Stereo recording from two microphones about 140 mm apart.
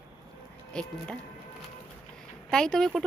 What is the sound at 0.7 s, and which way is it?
Speech, 5° left (ahead or behind).